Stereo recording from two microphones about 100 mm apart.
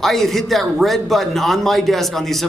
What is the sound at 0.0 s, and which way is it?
A man's voice, centre (ahead or behind).